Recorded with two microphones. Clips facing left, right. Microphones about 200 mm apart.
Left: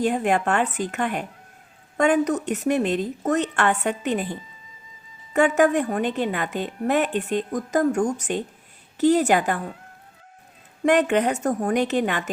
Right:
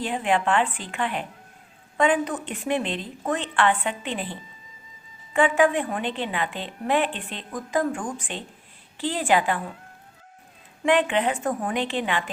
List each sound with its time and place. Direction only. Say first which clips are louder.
0.0 s a woman's voice: left 3 dB; 45° left (ahead or behind)
10.8 s a woman's voice: left 3 dB; 45° left (ahead or behind)